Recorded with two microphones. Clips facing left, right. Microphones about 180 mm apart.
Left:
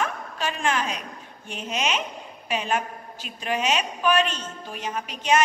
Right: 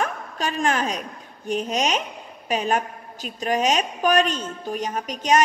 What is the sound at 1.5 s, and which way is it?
Speech, 40° right (ahead or behind).